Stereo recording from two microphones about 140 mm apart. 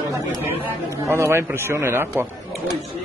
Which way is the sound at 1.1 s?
20° right (ahead or behind).